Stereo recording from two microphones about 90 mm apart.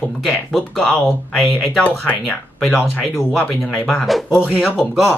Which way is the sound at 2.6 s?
Centre (ahead or behind).